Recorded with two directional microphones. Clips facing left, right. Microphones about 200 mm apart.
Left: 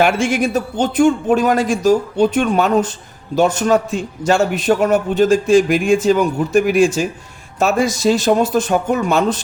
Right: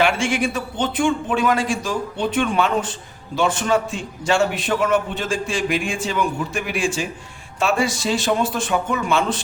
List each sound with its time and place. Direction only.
0.0 s a man's voice: 45° left (ahead or behind)